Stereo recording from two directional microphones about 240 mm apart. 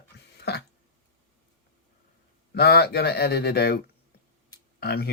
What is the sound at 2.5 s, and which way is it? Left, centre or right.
Speech, left.